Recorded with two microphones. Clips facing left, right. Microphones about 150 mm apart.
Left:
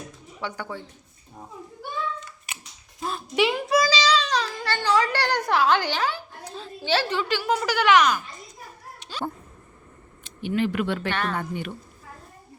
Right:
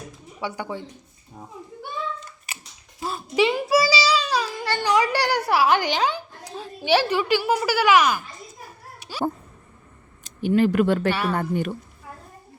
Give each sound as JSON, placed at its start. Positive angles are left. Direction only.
{"t": 0.3, "sound": "speech", "side_deg": -15}
{"t": 3.0, "sound": "a child's voice", "side_deg": 0}
{"t": 9.0, "sound": "a sound", "side_deg": -10}
{"t": 10.2, "sound": "speech", "side_deg": -40}
{"t": 11.1, "sound": "speech", "side_deg": -10}
{"t": 11.3, "sound": "speech", "side_deg": -45}